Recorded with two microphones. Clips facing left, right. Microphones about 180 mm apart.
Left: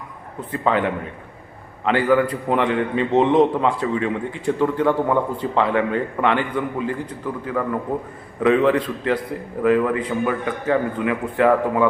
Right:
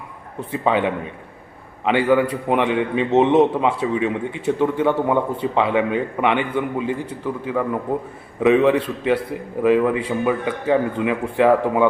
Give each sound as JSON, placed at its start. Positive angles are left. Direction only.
{"t": 0.5, "sound": "a man's voice", "side_deg": -15}
{"t": 2.0, "sound": "a man's voice", "side_deg": -10}
{"t": 6.9, "sound": "a man's voice", "side_deg": -10}
{"t": 9.6, "sound": "a man's voice", "side_deg": -15}